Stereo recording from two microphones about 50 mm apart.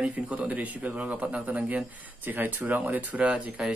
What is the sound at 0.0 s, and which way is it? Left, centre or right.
Speech, right.